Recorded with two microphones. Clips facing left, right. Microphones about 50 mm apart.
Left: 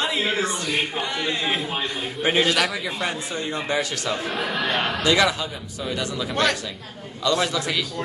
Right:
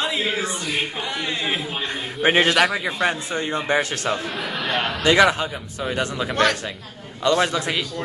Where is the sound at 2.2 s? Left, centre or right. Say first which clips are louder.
Right 4 dB; right.